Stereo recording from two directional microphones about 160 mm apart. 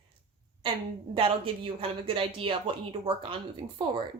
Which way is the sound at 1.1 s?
35° right (ahead or behind).